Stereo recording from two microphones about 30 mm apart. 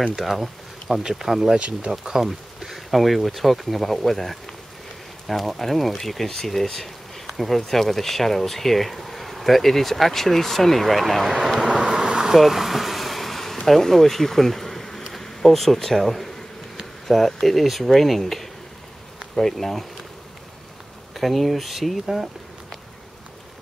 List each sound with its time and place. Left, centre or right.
0.3 s speech: centre
2.2 s a sound: centre
3.0 s speech: centre
11.9 s bee: right
12.4 s vehicle: centre
13.7 s speech: centre
21.1 s speech: centre
22.0 s speech: centre